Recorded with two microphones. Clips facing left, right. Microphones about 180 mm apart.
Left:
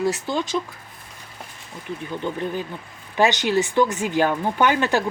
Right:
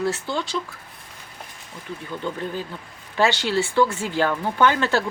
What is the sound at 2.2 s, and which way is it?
Speech, 15° left (ahead or behind).